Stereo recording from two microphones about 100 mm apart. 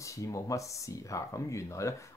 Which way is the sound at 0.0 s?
30° left (ahead or behind).